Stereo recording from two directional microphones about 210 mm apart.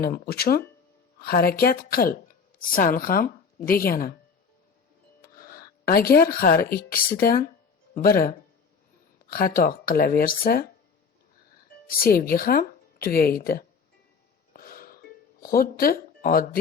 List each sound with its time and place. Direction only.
0.0 s speech: 45° left (ahead or behind)
5.2 s speech: 45° left (ahead or behind)
9.3 s speech: 45° left (ahead or behind)
11.9 s speech: 45° left (ahead or behind)
14.5 s music: 45° left (ahead or behind)